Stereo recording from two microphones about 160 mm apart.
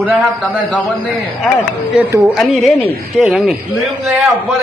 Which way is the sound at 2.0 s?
10° right (ahead or behind).